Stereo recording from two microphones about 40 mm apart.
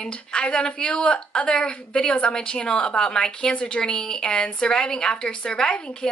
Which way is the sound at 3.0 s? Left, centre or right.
Centre.